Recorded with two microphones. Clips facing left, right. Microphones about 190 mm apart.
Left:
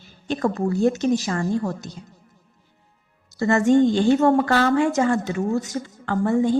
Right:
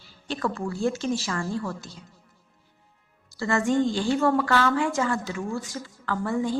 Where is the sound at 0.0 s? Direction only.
20° left (ahead or behind).